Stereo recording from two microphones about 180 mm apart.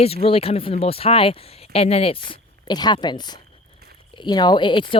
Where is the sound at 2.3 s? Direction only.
25° left (ahead or behind).